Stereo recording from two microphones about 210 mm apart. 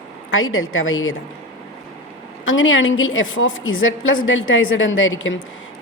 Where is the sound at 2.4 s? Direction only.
65° left (ahead or behind).